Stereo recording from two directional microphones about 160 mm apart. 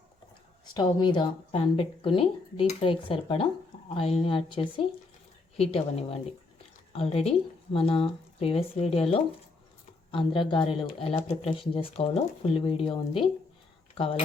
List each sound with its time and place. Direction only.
0.6 s speech: 25° left (ahead or behind)
13.9 s speech: 35° left (ahead or behind)